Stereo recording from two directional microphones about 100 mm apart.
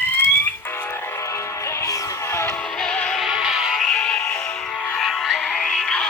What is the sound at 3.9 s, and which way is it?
Music, 10° left (ahead or behind).